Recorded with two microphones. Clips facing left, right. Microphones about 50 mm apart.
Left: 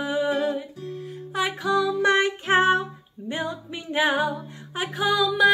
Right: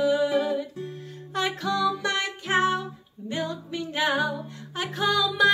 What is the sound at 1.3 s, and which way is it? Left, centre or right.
Music, centre.